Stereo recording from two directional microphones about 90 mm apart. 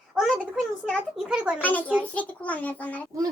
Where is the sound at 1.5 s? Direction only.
15° left (ahead or behind).